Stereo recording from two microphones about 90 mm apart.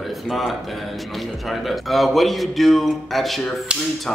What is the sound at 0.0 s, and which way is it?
A man's voice, centre (ahead or behind).